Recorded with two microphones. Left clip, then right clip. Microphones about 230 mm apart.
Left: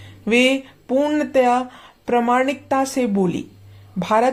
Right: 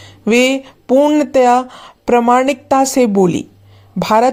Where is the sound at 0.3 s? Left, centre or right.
Right.